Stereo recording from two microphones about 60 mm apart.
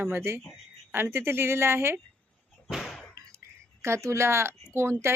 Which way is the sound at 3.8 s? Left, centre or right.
Right.